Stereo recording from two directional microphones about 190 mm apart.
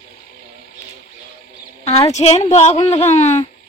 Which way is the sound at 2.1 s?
35° left (ahead or behind).